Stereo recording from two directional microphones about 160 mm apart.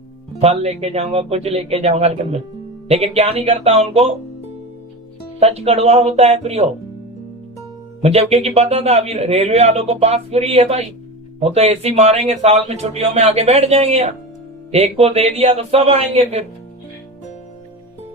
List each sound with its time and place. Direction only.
0.4 s speech: 40° right (ahead or behind)
5.4 s speech: 40° right (ahead or behind)
8.0 s speech: 40° right (ahead or behind)